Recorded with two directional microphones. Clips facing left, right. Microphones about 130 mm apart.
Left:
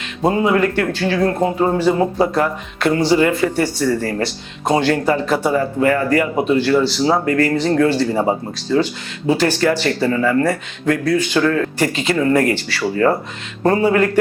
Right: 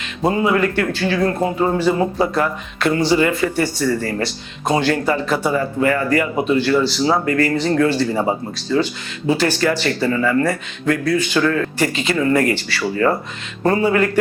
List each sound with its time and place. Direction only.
0.3 s speech: 35° left (ahead or behind)
6.8 s speech: 60° left (ahead or behind)
7.1 s speech: 40° left (ahead or behind)
8.0 s speech: 30° left (ahead or behind)
9.4 s speech: 55° left (ahead or behind); by 11.7 s 40° left (ahead or behind)
11.8 s speech: 50° left (ahead or behind)